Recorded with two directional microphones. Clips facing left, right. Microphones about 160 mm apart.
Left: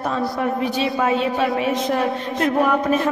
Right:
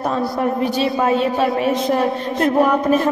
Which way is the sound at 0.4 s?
40° right (ahead or behind).